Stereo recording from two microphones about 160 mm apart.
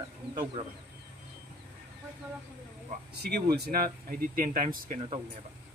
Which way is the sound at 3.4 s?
80° right.